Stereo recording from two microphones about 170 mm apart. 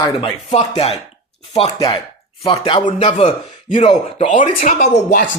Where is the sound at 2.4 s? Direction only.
30° left (ahead or behind).